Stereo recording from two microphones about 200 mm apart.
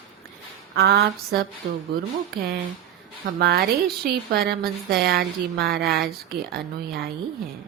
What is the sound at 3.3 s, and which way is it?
Speech, 50° right (ahead or behind).